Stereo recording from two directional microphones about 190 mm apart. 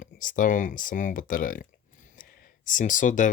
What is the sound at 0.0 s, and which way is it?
Speech, 45° left (ahead or behind).